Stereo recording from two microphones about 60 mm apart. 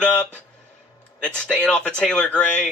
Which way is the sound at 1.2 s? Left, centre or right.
Centre.